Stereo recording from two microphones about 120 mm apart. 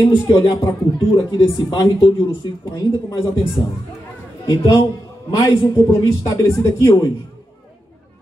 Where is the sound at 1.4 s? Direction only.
45° left (ahead or behind).